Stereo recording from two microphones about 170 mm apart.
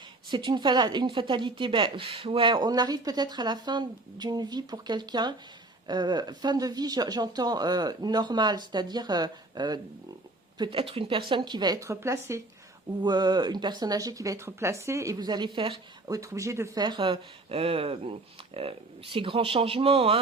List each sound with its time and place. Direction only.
0.3 s speech: 25° right (ahead or behind)